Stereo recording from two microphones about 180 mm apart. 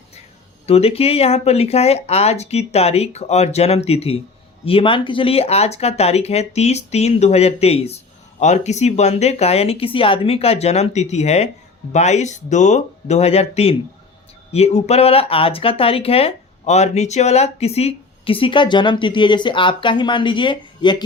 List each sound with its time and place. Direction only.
0.7 s speech: 35° left (ahead or behind)